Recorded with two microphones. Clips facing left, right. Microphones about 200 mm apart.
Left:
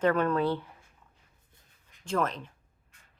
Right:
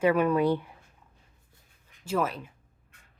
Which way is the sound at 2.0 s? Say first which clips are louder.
Right 1 dB; 5° right (ahead or behind).